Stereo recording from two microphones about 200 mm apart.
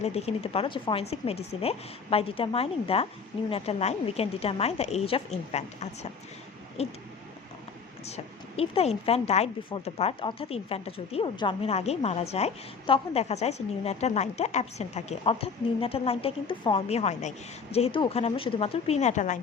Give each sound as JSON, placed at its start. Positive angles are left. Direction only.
{"t": 0.0, "sound": "speech", "side_deg": 30}
{"t": 8.0, "sound": "speech", "side_deg": 30}